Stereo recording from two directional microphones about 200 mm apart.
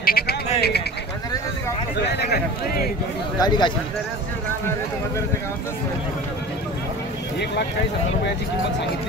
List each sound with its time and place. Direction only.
0.0 s a sound: 50° left (ahead or behind)
0.6 s speech: 55° left (ahead or behind)
2.0 s speech: 55° left (ahead or behind)
3.3 s speech: 20° left (ahead or behind)